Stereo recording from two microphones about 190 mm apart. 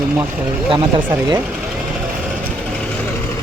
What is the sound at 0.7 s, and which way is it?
Speech, 25° right (ahead or behind).